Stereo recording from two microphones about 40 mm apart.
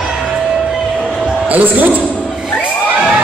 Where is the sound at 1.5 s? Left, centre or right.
Right.